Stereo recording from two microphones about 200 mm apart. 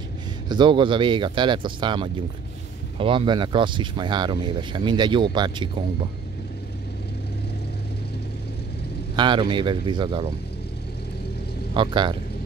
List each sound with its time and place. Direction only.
0.5 s speech: 25° right (ahead or behind)
9.1 s speech: 25° right (ahead or behind)
11.7 s speech: 25° right (ahead or behind)